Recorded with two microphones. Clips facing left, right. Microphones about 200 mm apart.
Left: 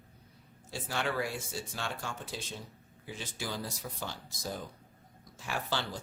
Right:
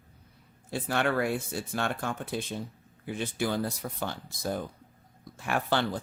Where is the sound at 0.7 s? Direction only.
60° right (ahead or behind).